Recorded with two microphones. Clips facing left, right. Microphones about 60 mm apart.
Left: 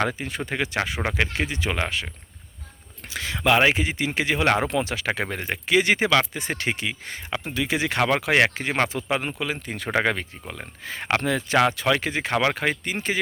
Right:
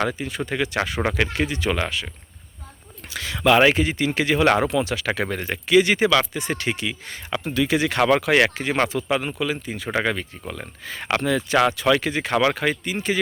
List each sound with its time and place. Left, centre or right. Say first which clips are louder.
0.0 s speech: right 1 dB; left
0.8 s a man's voice: right 2 dB; centre
3.1 s speech: right 3 dB; left
3.5 s a man's voice: right 3 dB; centre
4.7 s speech: right 2 dB; left
7.3 s speech: right 4 dB; centre
9.6 s speech: even; left
10.8 s speech: right 1 dB; left
12.3 s a man's voice: right 3 dB; centre
12.8 s speech: right 2 dB; left